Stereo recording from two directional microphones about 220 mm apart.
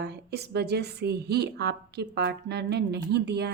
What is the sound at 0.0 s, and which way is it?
A woman's voice, 50° right (ahead or behind).